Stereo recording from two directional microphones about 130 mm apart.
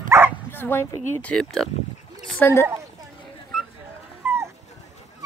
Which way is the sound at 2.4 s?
20° left (ahead or behind).